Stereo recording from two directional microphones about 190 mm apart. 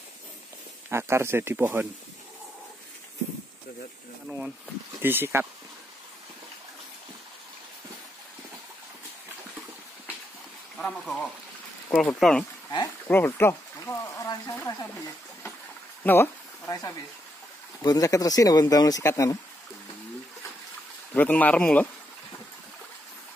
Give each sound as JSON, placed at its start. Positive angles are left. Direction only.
{"t": 0.8, "sound": "speech", "side_deg": -15}
{"t": 5.0, "sound": "speech", "side_deg": -10}
{"t": 10.8, "sound": "speech", "side_deg": 5}
{"t": 12.7, "sound": "speech", "side_deg": 15}
{"t": 16.0, "sound": "a sound", "side_deg": 10}
{"t": 17.8, "sound": "speech", "side_deg": 20}
{"t": 21.1, "sound": "speech", "side_deg": 10}